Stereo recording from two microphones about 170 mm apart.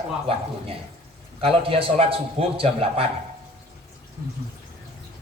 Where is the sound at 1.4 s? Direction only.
35° right (ahead or behind).